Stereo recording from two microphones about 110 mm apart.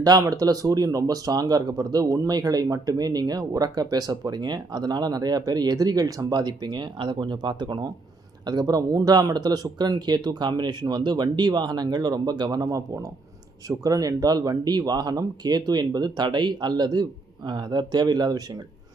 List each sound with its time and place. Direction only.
0.0 s speech: 35° right (ahead or behind)
13.7 s speech: 30° right (ahead or behind)